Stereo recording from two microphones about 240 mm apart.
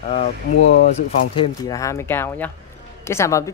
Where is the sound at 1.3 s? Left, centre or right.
Centre.